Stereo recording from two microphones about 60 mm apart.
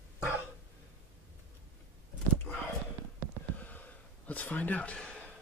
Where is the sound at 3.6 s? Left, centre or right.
Left.